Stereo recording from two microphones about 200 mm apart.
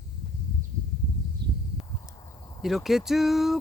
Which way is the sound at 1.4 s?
55° right (ahead or behind).